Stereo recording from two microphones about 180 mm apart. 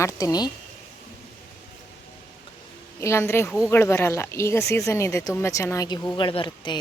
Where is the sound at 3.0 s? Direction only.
15° left (ahead or behind).